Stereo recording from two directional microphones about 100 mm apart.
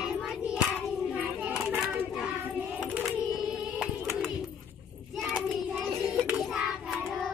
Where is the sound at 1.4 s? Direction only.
15° right (ahead or behind).